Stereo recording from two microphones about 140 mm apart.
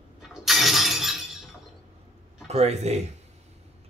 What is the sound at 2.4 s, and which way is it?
Speech, 50° right (ahead or behind).